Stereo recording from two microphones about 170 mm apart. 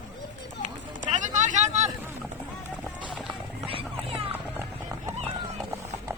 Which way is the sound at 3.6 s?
35° right (ahead or behind).